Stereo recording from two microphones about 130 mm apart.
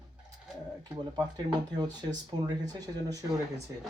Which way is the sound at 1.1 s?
30° right (ahead or behind).